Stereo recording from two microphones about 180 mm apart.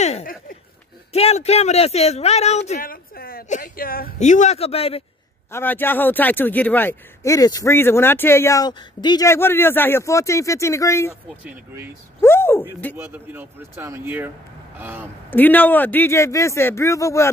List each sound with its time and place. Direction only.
0.2 s speech: 50° left (ahead or behind)
1.1 s speech: 35° left (ahead or behind)
2.8 s speech: 55° left (ahead or behind); by 5.0 s 35° left (ahead or behind)
5.5 s speech: 10° left (ahead or behind)
12.2 s a sound: 15° left (ahead or behind)
12.9 s speech: 10° right (ahead or behind)
15.2 s speech: 10° left (ahead or behind)